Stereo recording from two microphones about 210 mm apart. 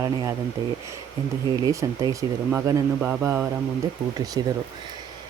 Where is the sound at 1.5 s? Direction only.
15° right (ahead or behind).